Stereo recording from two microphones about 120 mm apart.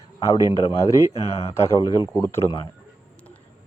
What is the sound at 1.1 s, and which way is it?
Speech, 60° left (ahead or behind).